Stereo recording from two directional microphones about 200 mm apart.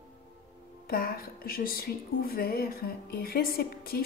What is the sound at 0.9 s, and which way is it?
A woman's voice, 50° left (ahead or behind).